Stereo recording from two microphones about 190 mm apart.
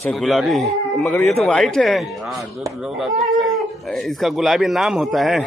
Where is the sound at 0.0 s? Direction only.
Centre (ahead or behind).